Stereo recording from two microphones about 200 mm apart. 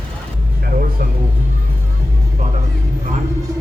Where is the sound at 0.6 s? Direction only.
45° right (ahead or behind).